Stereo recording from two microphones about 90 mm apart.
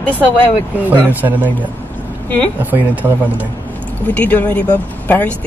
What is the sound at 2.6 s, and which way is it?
Speech, 20° right (ahead or behind).